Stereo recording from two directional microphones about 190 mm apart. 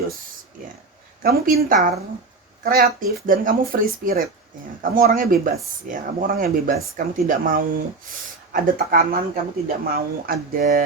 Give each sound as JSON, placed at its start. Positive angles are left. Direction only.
{"t": 1.2, "sound": "speech", "side_deg": -50}